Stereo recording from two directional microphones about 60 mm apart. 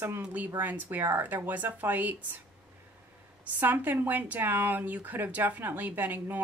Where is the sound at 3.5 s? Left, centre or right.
Right.